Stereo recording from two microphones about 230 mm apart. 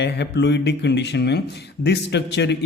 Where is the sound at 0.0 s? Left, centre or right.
Left.